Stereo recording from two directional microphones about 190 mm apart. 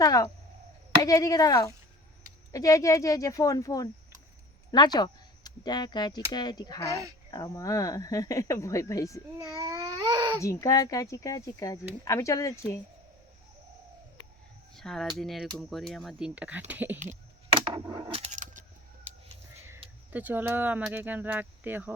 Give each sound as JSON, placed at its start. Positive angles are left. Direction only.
{"t": 0.0, "sound": "speech", "side_deg": 20}
{"t": 9.6, "sound": "speech", "side_deg": -20}
{"t": 10.4, "sound": "speech", "side_deg": 15}
{"t": 14.8, "sound": "speech", "side_deg": 0}
{"t": 17.5, "sound": "a sound", "side_deg": -25}
{"t": 17.8, "sound": "speech", "side_deg": -20}
{"t": 18.3, "sound": "a sound", "side_deg": -40}
{"t": 20.1, "sound": "speech", "side_deg": -10}